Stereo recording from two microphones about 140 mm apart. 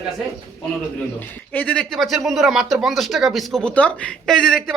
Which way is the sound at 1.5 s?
10° left (ahead or behind).